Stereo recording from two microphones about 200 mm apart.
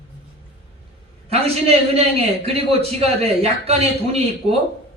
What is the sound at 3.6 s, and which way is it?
Speech, 30° right (ahead or behind).